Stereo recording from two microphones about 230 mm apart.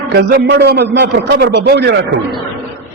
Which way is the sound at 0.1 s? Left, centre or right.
Right.